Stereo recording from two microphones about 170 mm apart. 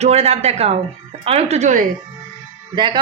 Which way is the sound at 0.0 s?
40° right (ahead or behind).